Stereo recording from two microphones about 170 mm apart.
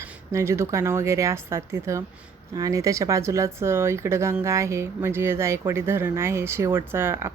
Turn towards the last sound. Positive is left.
turn(degrees=-15)  # may be behind; listen again after turning